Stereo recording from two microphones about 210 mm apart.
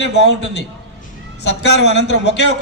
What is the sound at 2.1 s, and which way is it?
Speech, 60° left (ahead or behind).